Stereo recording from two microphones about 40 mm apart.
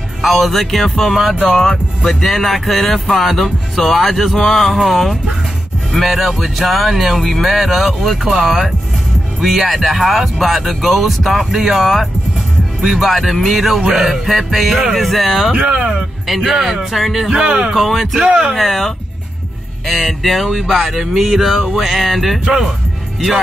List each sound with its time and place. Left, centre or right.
0.2 s speech: centre
13.7 s music: centre
15.0 s speech: centre
15.5 s speech: right
16.3 s music: centre
16.9 s speech: centre
17.3 s speech: right
17.7 s speech: centre
18.2 s speech: centre
18.5 s speech: centre